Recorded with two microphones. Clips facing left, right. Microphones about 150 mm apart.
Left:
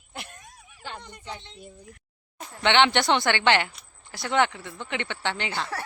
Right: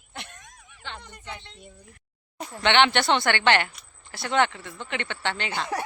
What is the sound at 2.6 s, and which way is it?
Speech, 15° left (ahead or behind).